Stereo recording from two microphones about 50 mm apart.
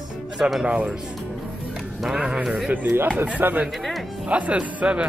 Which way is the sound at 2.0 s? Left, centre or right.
Centre.